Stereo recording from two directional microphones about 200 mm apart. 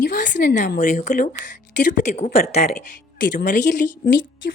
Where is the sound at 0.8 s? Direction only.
40° left (ahead or behind).